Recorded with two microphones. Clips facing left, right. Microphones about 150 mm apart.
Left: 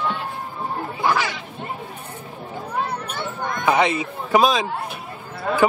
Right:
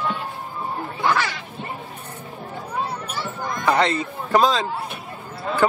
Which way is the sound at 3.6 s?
10° left (ahead or behind).